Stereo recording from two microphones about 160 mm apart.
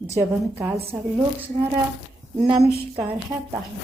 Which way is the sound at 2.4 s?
25° right (ahead or behind).